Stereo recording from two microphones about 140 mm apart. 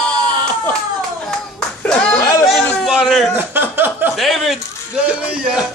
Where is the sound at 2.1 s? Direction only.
25° left (ahead or behind).